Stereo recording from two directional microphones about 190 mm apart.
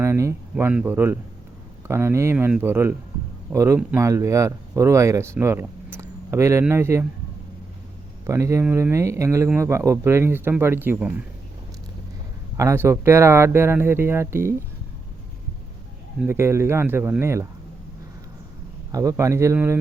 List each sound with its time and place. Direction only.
0.0 s a sound: 15° right (ahead or behind)
0.5 s speech: 5° right (ahead or behind)
8.3 s speech: 15° right (ahead or behind)
12.5 s speech: 15° right (ahead or behind)
16.2 s speech: 15° right (ahead or behind)
18.9 s speech: 15° right (ahead or behind)